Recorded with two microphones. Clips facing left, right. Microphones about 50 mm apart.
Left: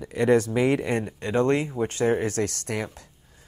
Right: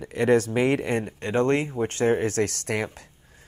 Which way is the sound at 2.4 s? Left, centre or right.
Right.